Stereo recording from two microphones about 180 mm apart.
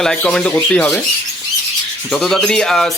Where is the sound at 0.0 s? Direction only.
5° left (ahead or behind).